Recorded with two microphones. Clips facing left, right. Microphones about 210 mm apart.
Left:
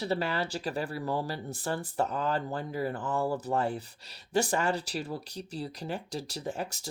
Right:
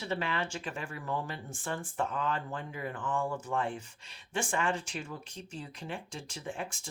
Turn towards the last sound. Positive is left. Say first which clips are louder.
# left 4 dB
turn(degrees=40)  # may be behind; listen again after turning